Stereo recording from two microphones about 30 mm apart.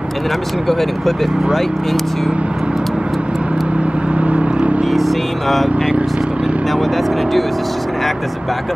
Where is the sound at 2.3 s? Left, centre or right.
Right.